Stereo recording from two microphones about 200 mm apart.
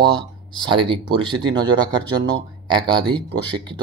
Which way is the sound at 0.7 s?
25° right (ahead or behind).